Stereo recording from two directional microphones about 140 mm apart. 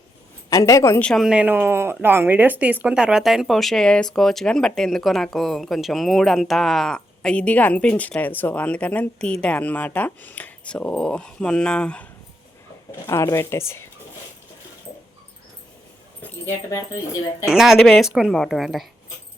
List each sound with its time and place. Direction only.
0.5 s speech: 25° left (ahead or behind)
1.0 s speech: centre (ahead or behind)
13.1 s speech: 20° left (ahead or behind)
17.4 s speech: centre (ahead or behind)